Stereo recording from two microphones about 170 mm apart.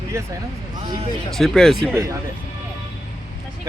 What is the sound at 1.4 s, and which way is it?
Speech, centre (ahead or behind).